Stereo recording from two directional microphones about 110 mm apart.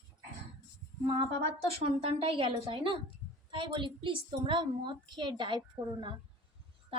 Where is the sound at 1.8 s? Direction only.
65° right (ahead or behind).